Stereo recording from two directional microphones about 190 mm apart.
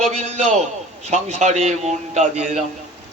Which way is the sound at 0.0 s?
35° right (ahead or behind).